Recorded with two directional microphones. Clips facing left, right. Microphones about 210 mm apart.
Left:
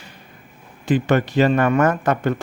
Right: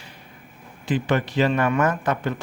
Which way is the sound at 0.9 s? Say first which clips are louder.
Left 5 dB; 45° left (ahead or behind).